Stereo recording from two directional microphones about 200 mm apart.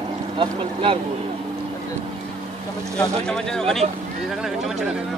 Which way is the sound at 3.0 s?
5° left (ahead or behind).